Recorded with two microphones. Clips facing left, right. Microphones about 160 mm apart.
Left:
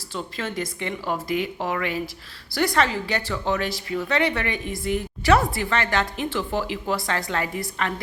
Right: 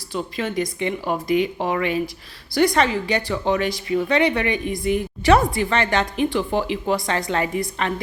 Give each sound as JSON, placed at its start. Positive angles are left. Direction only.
{"t": 0.1, "sound": "speech", "side_deg": -15}